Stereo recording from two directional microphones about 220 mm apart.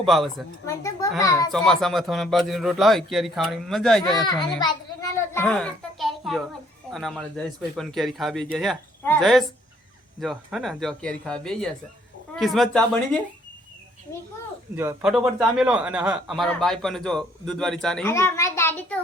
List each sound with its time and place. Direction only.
0.0 s speech: centre (ahead or behind)
0.7 s a child's voice: 15° left (ahead or behind)
1.5 s speech: centre (ahead or behind)
4.6 s a sound: 15° left (ahead or behind); by 6.4 s centre (ahead or behind)
6.9 s speech: 5° left (ahead or behind)
14.8 s speech: 5° right (ahead or behind); by 18.9 s 10° left (ahead or behind)